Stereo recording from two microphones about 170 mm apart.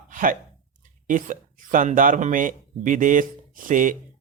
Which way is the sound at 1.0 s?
50° right (ahead or behind).